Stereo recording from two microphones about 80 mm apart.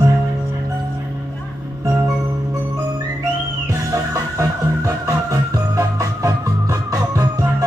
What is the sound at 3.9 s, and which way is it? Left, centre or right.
Music, right.